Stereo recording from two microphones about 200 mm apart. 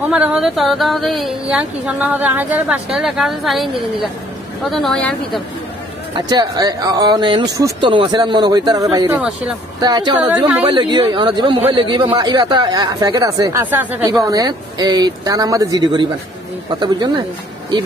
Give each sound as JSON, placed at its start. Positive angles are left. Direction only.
{"t": 0.1, "sound": "speech", "side_deg": -5}
{"t": 6.1, "sound": "speech", "side_deg": -20}
{"t": 10.1, "sound": "speech", "side_deg": -5}
{"t": 10.7, "sound": "speech", "side_deg": -20}